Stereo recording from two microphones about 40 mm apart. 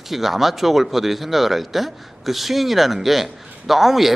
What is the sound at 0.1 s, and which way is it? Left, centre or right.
Speech, centre.